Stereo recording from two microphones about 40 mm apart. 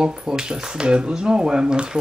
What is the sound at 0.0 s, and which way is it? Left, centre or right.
Speech, centre.